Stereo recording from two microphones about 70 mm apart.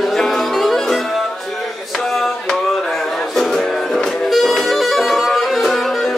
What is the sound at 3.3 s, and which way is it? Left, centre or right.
Music, centre.